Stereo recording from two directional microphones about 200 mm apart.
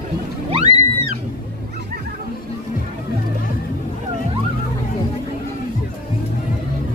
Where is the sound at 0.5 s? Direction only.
30° right (ahead or behind).